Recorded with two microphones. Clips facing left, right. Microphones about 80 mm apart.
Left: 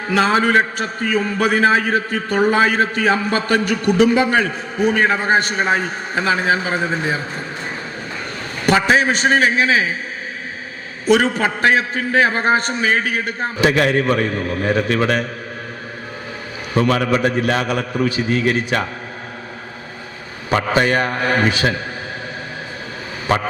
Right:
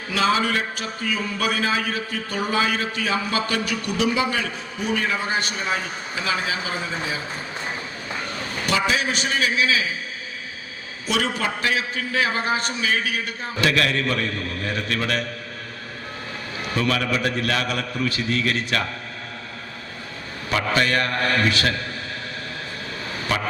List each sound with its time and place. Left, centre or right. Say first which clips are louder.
0.1 s a man's voice: left 6 dB; left
8.6 s a man's voice: left 8 dB; left
11.0 s a man's voice: left 9 dB; left
13.6 s a man's voice: left 5 dB; left
16.7 s a man's voice: left 7 dB; left
20.7 s a man's voice: left 4 dB; left